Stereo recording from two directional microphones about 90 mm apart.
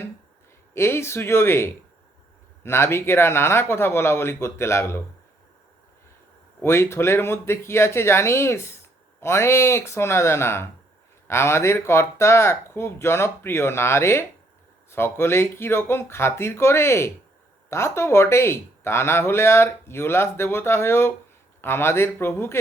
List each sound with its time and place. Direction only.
0.7 s speech: 30° left (ahead or behind)
6.6 s speech: 30° left (ahead or behind)